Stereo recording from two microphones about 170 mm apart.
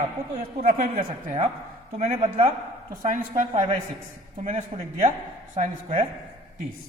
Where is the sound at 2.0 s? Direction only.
35° right (ahead or behind).